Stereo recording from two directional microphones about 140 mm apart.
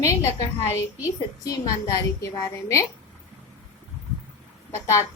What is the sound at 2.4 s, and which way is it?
Speech, 20° left (ahead or behind).